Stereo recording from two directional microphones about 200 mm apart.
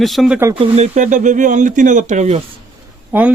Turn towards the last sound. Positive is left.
turn(degrees=-10)  # may be behind; listen again after turning